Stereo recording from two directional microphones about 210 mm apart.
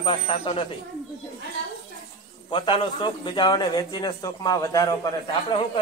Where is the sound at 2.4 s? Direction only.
25° left (ahead or behind).